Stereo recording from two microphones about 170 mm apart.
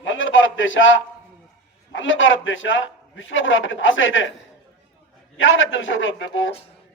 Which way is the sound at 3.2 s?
90° left.